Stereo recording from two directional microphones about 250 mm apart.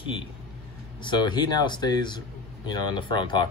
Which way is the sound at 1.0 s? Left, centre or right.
Centre.